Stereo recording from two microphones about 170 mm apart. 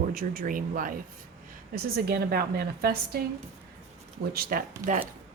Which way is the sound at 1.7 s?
65° right (ahead or behind).